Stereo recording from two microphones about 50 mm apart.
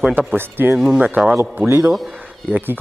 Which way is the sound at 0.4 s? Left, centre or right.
Right.